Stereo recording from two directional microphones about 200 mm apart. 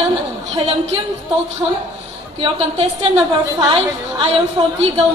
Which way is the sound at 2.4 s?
30° right (ahead or behind).